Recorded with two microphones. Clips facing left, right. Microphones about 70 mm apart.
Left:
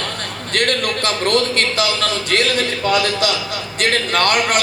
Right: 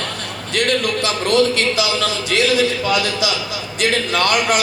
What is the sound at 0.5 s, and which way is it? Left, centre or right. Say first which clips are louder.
A man's voice: right 1 dB; left.